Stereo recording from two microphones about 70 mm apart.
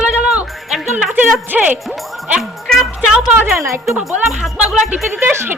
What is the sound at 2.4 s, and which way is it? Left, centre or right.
Music, centre.